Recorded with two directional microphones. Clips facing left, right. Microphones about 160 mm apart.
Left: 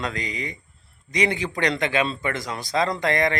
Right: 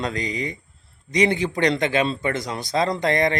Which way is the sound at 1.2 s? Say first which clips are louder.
Right 4 dB; 25° right (ahead or behind).